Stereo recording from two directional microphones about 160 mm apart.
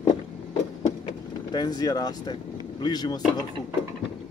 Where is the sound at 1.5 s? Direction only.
25° left (ahead or behind).